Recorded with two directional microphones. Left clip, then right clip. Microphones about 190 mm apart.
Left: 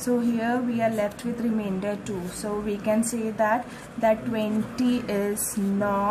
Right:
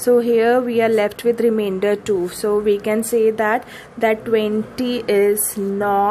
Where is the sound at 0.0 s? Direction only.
45° right (ahead or behind).